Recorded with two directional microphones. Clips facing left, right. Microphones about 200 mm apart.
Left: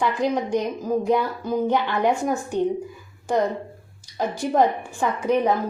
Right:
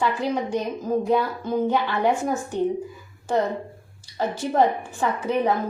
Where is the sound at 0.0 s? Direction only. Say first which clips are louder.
Left 1 dB; 15° left (ahead or behind).